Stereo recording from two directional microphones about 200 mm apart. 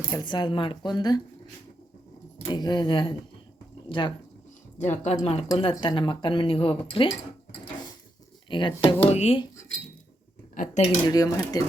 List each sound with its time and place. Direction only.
0.1 s speech: 20° left (ahead or behind)
2.4 s speech: 20° left (ahead or behind)
4.8 s speech: 35° left (ahead or behind)
8.4 s speech: 25° left (ahead or behind)
10.5 s speech: 40° left (ahead or behind)
11.1 s speech: 20° left (ahead or behind)